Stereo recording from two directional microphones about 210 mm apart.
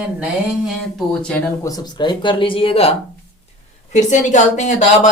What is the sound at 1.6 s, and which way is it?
A woman's voice, 20° left (ahead or behind).